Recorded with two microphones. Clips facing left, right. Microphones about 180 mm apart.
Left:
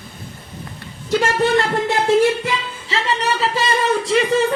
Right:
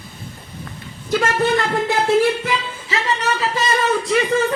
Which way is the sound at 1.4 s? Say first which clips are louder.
Left 1 dB; centre (ahead or behind).